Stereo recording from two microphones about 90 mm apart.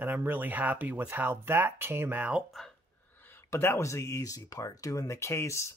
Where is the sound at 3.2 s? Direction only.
25° left (ahead or behind).